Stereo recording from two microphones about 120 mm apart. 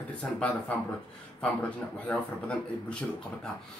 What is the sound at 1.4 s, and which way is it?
Speech, 10° left (ahead or behind).